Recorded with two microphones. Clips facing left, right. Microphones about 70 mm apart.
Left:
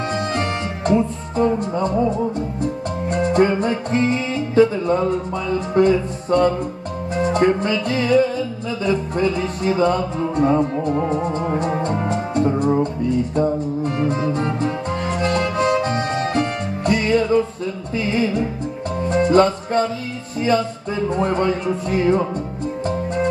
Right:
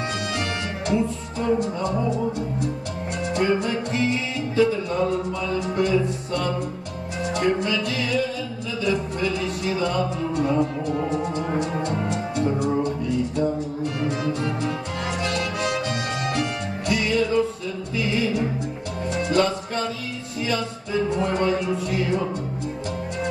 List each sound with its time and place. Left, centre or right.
0.3 s music: left
5.8 s speech: left
13.9 s music: left
17.9 s speech: left
19.0 s music: left
20.3 s speech: left